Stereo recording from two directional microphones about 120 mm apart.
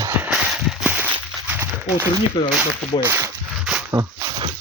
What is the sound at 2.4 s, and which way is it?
Speech, 35° left (ahead or behind).